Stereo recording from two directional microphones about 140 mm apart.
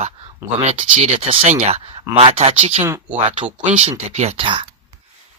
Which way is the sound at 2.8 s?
15° right (ahead or behind).